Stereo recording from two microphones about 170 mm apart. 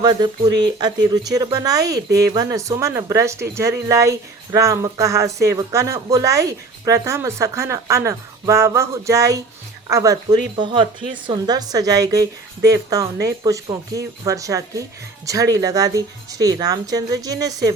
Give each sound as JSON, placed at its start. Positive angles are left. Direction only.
{"t": 0.0, "sound": "speech", "side_deg": -25}